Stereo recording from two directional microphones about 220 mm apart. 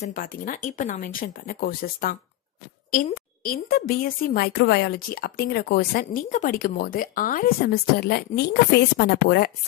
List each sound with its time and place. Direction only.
0.0 s speech: 40° left (ahead or behind)
3.4 s a woman's voice: 45° left (ahead or behind)